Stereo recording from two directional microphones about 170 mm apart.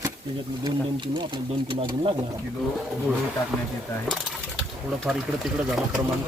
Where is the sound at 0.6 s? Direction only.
25° right (ahead or behind).